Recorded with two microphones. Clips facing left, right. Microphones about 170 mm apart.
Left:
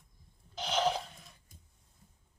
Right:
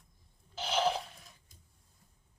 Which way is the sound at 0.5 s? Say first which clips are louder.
Even; 5° right (ahead or behind).